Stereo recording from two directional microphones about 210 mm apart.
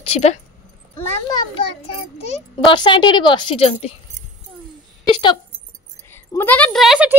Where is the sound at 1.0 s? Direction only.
20° left (ahead or behind).